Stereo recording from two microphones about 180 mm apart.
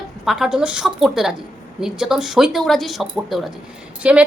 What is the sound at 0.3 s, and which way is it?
A woman's voice, centre (ahead or behind).